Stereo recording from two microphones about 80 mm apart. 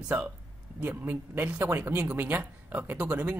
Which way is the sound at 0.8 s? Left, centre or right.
Right.